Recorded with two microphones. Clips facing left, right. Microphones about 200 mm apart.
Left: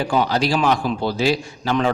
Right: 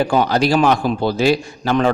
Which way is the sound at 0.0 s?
50° right (ahead or behind).